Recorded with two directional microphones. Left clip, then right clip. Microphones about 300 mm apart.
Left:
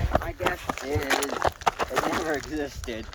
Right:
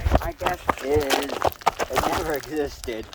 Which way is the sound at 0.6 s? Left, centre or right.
Right.